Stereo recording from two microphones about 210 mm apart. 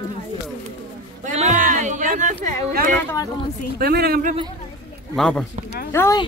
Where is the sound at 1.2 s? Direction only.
35° right (ahead or behind).